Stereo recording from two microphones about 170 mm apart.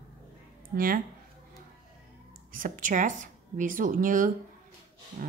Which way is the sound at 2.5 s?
50° right (ahead or behind).